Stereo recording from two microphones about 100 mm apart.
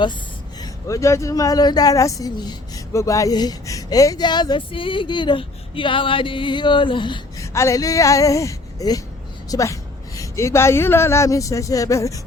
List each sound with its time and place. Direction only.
0.6 s speech: 35° left (ahead or behind); by 7.2 s 55° left (ahead or behind)
7.3 s speech: 30° left (ahead or behind)